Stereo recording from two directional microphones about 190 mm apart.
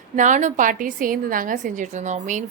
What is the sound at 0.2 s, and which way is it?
A woman's voice, 40° right (ahead or behind).